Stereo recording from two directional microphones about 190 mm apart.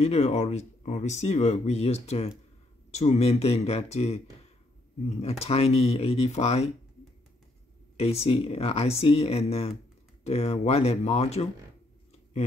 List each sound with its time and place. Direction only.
0.0 s speech: 35° left (ahead or behind)
8.0 s speech: 35° left (ahead or behind)